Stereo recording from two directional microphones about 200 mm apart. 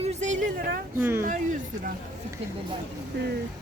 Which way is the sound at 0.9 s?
10° right (ahead or behind).